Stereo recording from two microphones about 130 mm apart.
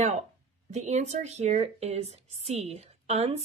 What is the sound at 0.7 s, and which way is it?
Speech, 60° right (ahead or behind).